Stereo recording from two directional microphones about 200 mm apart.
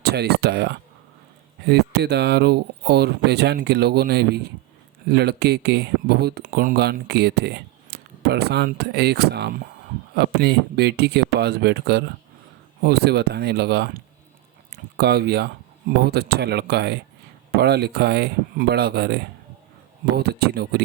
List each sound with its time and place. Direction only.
0.0 s speech: 55° right (ahead or behind)